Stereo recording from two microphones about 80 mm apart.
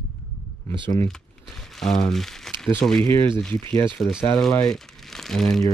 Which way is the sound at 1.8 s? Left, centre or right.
Centre.